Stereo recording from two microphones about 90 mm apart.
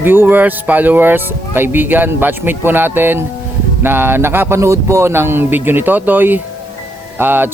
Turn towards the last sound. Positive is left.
turn(degrees=-25)  # may be behind; listen again after turning